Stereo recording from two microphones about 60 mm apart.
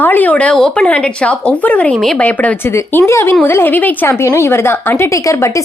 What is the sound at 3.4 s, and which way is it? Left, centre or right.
Speech, left.